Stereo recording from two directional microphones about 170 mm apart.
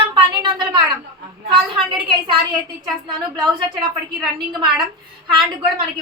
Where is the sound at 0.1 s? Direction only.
25° right (ahead or behind).